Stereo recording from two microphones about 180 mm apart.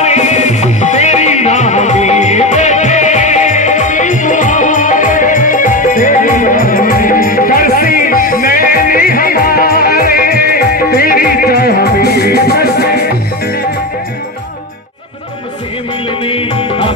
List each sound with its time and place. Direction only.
0.0 s music: 40° left (ahead or behind); by 13.0 s 60° left (ahead or behind)
16.3 s music: 30° left (ahead or behind)